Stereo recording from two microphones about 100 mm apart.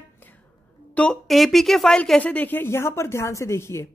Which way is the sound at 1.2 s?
Centre (ahead or behind).